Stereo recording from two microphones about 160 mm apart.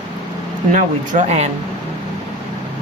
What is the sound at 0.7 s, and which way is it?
Speech, 50° right (ahead or behind).